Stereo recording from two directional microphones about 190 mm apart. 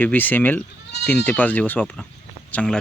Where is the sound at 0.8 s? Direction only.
65° left (ahead or behind).